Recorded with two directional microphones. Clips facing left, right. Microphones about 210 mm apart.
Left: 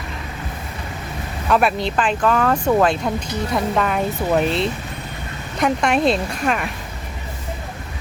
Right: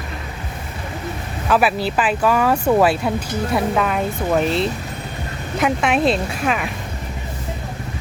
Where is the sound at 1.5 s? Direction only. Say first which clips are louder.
Even; 5° right (ahead or behind).